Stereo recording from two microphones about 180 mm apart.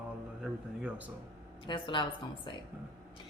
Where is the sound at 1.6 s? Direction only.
25° left (ahead or behind).